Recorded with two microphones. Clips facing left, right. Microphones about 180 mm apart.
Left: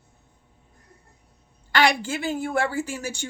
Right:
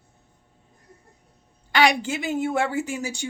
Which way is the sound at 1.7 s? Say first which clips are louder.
Right 1 dB; 20° right (ahead or behind).